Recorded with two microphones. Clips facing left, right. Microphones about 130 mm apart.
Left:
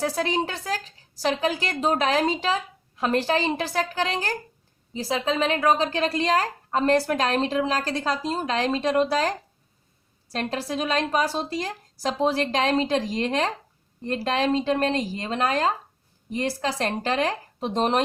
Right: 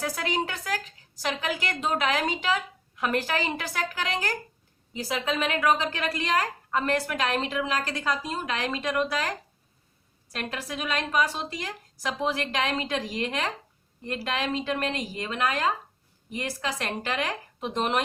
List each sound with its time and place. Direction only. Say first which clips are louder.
0.0 s a woman's voice: left 4 dB; 30° left (ahead or behind)
10.3 s a woman's voice: left 6 dB; 35° left (ahead or behind)